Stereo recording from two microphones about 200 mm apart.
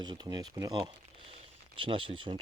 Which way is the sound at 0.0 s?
20° right (ahead or behind).